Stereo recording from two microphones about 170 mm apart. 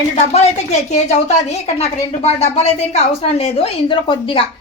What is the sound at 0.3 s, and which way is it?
A woman's voice, 40° left (ahead or behind).